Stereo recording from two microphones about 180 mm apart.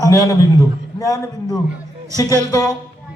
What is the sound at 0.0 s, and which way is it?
A man's voice, 20° left (ahead or behind).